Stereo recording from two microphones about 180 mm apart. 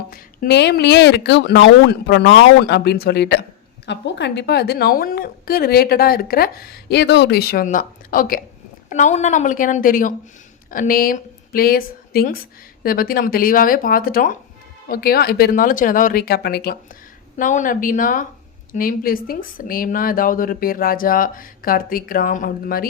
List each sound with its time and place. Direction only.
0.1 s a woman's voice: 70° left (ahead or behind)
17.3 s speech: 45° left (ahead or behind)